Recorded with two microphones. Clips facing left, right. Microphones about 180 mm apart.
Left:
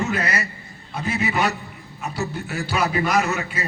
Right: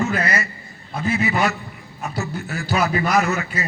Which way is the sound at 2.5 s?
40° right (ahead or behind).